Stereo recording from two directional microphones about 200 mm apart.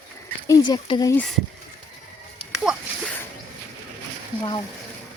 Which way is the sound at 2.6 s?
5° right (ahead or behind).